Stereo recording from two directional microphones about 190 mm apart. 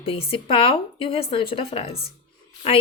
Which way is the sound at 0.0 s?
30° left (ahead or behind).